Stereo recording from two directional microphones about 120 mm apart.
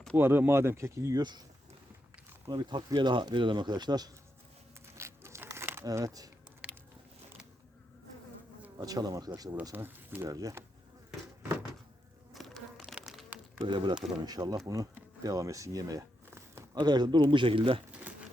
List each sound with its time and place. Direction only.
0.2 s speech: 20° right (ahead or behind); by 1.5 s 35° right (ahead or behind)
2.5 s speech: 35° right (ahead or behind)
4.9 s crumpling: 25° right (ahead or behind)
6.6 s biting: 10° right (ahead or behind)
8.8 s speech: 30° right (ahead or behind)
9.7 s speech: 15° right (ahead or behind)
10.2 s speech: 30° right (ahead or behind)
12.3 s insect: centre (ahead or behind)
13.6 s speech: 40° right (ahead or behind); by 16.6 s 25° right (ahead or behind)
16.7 s speech: 35° right (ahead or behind)